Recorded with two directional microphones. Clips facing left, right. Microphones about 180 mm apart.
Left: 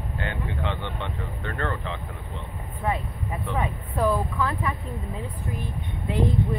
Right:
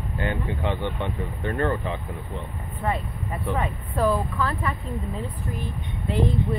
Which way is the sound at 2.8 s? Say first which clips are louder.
Even; 15° left (ahead or behind).